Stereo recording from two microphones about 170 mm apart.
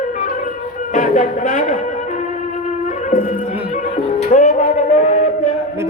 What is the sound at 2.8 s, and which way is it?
Music, 50° left (ahead or behind).